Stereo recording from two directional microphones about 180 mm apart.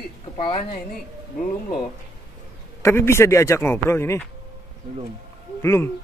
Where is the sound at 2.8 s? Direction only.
15° left (ahead or behind).